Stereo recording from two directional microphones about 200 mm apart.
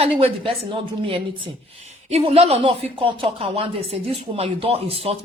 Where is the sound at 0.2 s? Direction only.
25° right (ahead or behind).